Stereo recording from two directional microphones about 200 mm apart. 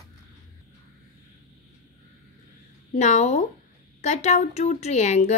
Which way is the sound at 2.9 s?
35° left (ahead or behind).